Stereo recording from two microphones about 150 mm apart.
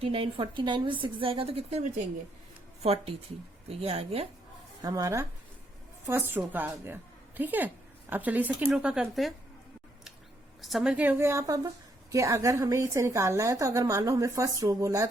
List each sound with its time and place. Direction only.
0.0 s a woman's voice: 35° right (ahead or behind)
4.8 s a woman's voice: 25° right (ahead or behind); by 9.3 s 5° right (ahead or behind)
10.6 s a woman's voice: centre (ahead or behind); by 15.0 s 20° right (ahead or behind)